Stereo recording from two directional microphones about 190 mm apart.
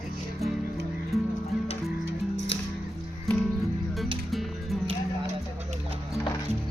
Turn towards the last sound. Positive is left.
turn(degrees=0)  # may be behind; listen again after turning